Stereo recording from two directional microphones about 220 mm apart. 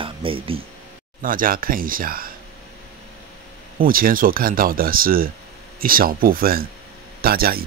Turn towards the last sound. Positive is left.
turn(degrees=-45)  # may be behind; listen again after turning